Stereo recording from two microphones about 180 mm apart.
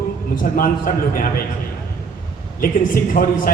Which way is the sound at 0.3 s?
50° left (ahead or behind).